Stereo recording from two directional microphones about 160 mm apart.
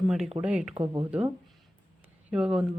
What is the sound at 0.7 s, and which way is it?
Speech, 30° right (ahead or behind).